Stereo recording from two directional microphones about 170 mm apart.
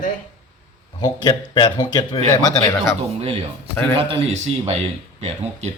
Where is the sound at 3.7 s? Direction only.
10° left (ahead or behind).